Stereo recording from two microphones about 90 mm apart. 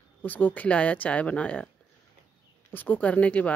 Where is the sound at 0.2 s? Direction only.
20° left (ahead or behind).